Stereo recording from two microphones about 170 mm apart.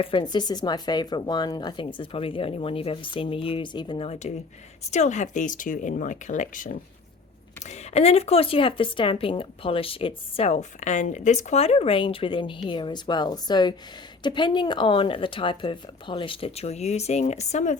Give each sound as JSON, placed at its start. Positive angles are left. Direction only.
{"t": 0.0, "sound": "a woman's voice", "side_deg": 30}
{"t": 7.6, "sound": "speech", "side_deg": 40}